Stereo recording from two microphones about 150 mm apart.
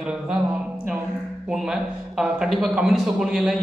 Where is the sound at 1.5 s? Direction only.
Centre (ahead or behind).